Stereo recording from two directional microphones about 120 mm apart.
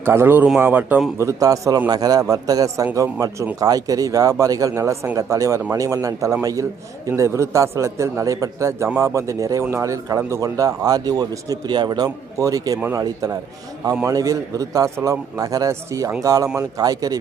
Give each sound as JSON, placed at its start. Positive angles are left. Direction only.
{"t": 0.0, "sound": "speech", "side_deg": -20}
{"t": 1.2, "sound": "a man's voice", "side_deg": -25}